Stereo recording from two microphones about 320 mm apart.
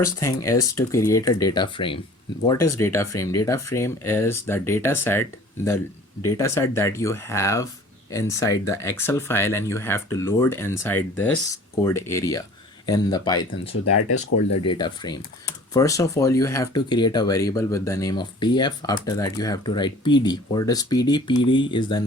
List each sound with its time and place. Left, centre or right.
0.0 s speech: centre
13.9 s speech: left
14.8 s speech: centre